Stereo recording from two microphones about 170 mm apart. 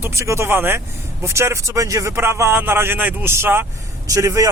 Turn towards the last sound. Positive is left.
turn(degrees=-20)  # may be behind; listen again after turning